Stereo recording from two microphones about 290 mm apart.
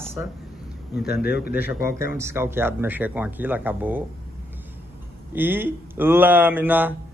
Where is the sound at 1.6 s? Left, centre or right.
Centre.